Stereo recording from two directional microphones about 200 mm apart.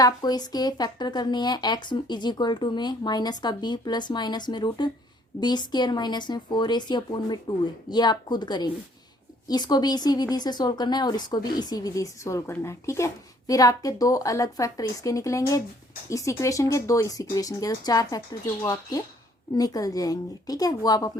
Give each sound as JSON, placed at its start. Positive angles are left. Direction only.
{"t": 0.0, "sound": "speech", "side_deg": 20}